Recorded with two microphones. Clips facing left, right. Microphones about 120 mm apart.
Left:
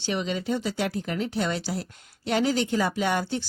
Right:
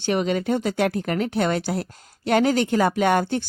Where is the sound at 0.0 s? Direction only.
55° right (ahead or behind).